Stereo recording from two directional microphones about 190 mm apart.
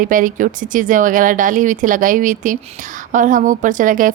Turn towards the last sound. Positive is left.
turn(degrees=-45)  # may be behind; listen again after turning